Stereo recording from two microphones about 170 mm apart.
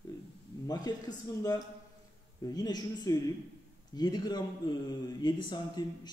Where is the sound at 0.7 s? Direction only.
25° left (ahead or behind).